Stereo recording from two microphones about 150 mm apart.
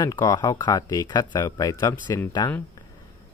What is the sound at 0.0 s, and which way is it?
Speech, 25° left (ahead or behind).